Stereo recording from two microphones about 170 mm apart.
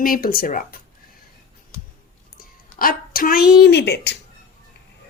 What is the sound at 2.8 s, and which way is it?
Speech, 60° left (ahead or behind).